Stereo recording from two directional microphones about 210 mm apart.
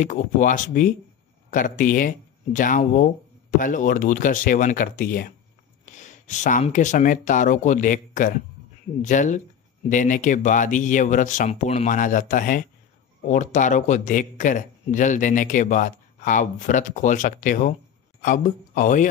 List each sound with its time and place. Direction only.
0.0 s a man's voice: 40° left (ahead or behind)